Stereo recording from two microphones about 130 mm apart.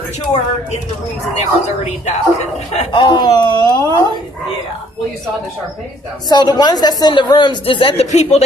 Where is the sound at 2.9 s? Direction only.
40° left (ahead or behind).